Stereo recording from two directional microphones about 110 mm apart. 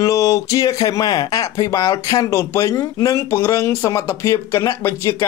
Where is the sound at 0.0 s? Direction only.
30° left (ahead or behind).